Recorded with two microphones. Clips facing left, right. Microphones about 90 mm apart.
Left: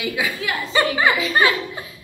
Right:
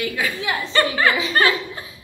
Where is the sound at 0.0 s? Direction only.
10° left (ahead or behind).